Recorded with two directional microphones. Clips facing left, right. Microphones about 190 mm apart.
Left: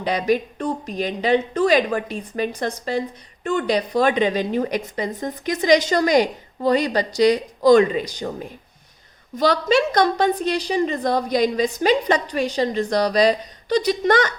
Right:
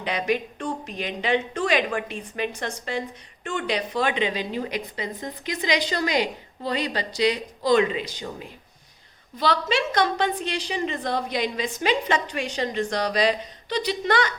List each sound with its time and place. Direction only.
0.0 s a woman's voice: 35° left (ahead or behind)